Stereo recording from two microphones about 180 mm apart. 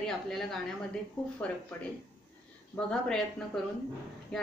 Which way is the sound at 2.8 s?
5° left (ahead or behind).